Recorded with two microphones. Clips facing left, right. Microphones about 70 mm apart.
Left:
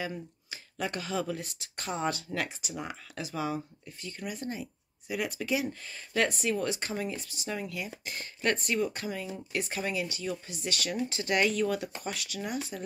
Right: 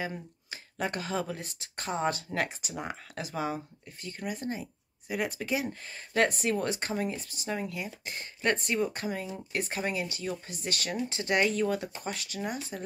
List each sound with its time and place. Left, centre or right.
0.0 s speech: right
11.1 s speech: right
12.7 s speech: right